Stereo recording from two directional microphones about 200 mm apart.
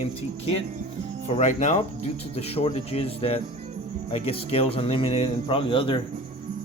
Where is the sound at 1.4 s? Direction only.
35° left (ahead or behind).